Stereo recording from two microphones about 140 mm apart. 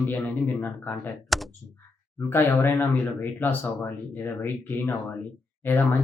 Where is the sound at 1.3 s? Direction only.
Centre (ahead or behind).